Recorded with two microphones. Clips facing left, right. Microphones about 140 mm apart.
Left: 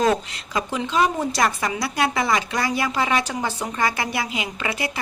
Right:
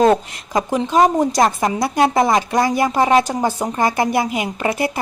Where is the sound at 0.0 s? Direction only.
45° right (ahead or behind).